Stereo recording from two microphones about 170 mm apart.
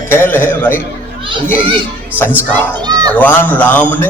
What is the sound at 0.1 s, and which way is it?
Speech, 15° left (ahead or behind).